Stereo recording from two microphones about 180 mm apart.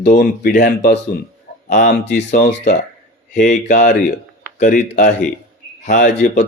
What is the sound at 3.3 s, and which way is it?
Speech, 45° left (ahead or behind).